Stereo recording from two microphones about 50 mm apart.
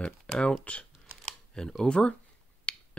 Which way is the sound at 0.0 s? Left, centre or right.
Centre.